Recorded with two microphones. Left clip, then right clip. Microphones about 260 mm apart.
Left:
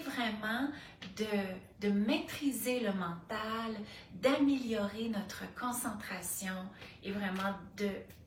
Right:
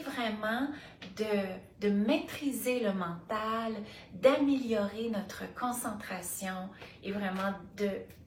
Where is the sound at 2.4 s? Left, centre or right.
Left.